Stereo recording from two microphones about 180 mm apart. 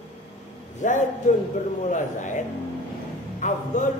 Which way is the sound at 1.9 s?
45° left (ahead or behind).